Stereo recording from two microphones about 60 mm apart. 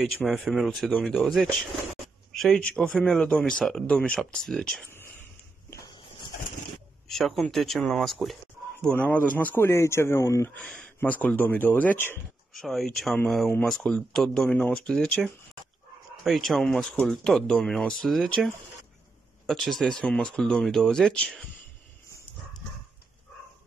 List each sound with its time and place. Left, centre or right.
0.0 s speech: centre
2.8 s speech: centre
4.3 s speech: centre
7.1 s speech: centre
8.9 s speech: left
9.7 s speech: left
11.0 s speech: left
12.5 s speech: centre
16.3 s speech: centre
19.4 s speech: centre